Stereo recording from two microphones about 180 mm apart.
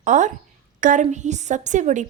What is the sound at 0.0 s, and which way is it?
A woman's voice, 45° right (ahead or behind).